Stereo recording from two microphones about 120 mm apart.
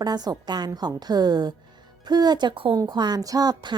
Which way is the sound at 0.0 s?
35° right (ahead or behind).